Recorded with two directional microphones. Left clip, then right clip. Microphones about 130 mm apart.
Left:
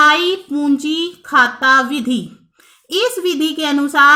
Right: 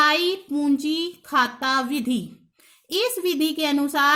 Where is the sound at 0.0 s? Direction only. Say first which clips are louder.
Left 8 dB; 35° right (ahead or behind).